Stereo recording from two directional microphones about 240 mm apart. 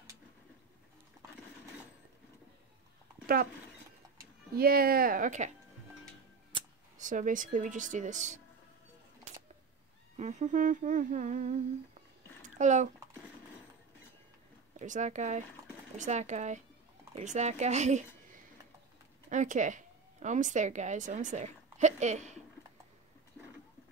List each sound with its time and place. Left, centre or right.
4.6 s humming: right
7.0 s humming: right
10.1 s humming: right
12.5 s a child's voice: right
14.8 s a woman's voice: right